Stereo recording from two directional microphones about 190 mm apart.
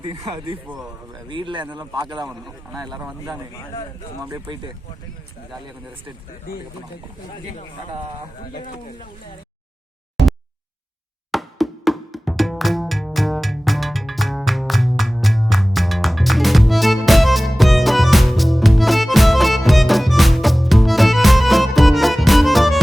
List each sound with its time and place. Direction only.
0.3 s speech: 25° right (ahead or behind)
0.7 s speech: 5° right (ahead or behind)
1.3 s speech: 25° right (ahead or behind)
2.7 s speech: centre (ahead or behind)
4.3 s speech: 25° right (ahead or behind)
6.5 s speech: 50° left (ahead or behind)
11.3 s music: centre (ahead or behind)